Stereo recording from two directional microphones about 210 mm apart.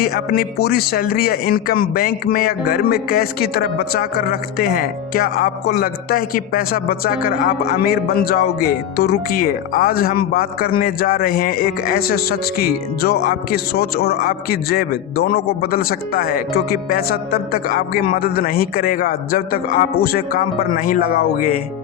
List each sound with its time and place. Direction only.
0.0 s speech: 45° left (ahead or behind)